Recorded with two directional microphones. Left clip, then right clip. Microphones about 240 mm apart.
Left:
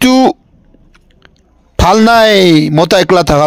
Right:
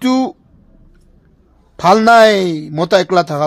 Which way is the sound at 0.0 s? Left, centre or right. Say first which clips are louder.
Left 8 dB; left.